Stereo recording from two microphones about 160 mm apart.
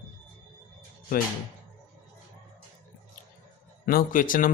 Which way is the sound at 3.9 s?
60° left (ahead or behind).